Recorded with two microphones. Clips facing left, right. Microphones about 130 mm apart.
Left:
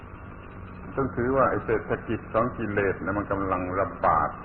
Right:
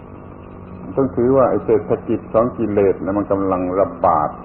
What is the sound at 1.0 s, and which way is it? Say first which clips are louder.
A man's voice: right 10 dB; 40° right (ahead or behind).